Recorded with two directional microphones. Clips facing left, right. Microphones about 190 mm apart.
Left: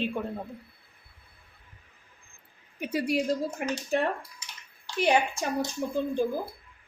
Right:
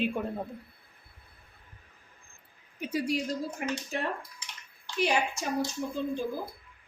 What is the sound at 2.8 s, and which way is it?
Speech, 60° left (ahead or behind).